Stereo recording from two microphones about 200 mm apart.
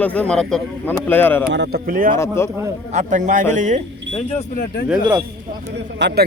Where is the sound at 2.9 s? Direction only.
35° right (ahead or behind).